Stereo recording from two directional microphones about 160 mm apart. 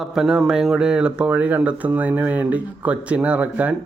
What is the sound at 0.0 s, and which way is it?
Speech, centre (ahead or behind).